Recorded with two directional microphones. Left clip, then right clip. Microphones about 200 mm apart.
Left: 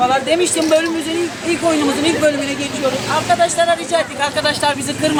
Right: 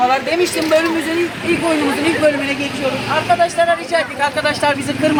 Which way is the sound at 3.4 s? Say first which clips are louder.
Even; 5° left (ahead or behind).